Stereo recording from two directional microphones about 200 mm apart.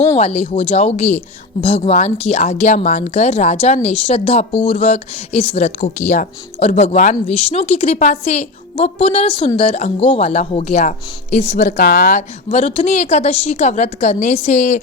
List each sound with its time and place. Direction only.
0.2 s speech: 30° left (ahead or behind)